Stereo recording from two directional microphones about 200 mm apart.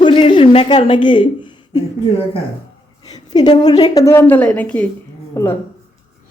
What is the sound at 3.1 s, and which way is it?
A woman's voice, 20° left (ahead or behind).